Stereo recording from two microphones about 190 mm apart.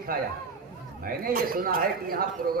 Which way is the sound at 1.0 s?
50° right (ahead or behind).